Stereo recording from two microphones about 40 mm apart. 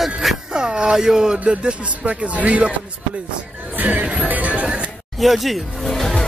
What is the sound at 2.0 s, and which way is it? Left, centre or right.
Speech, right.